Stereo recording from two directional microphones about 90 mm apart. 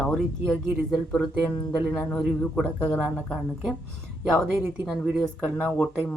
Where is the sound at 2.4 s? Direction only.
10° left (ahead or behind).